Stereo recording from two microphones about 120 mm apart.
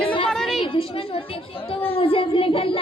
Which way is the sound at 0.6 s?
50° left (ahead or behind).